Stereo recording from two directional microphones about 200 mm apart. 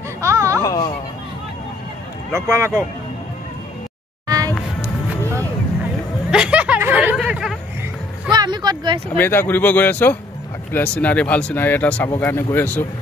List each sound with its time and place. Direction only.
0.2 s a sound: 15° right (ahead or behind)
0.6 s speech: 20° left (ahead or behind)
2.3 s speech: 15° right (ahead or behind)
6.3 s a sound: 5° right (ahead or behind)
8.3 s vehicle: 20° right (ahead or behind)
9.1 s speech: 10° left (ahead or behind)